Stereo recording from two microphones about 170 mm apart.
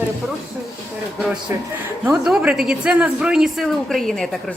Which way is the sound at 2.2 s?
5° right (ahead or behind).